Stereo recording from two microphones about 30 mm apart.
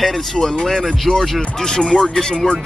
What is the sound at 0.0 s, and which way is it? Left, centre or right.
Speech, centre.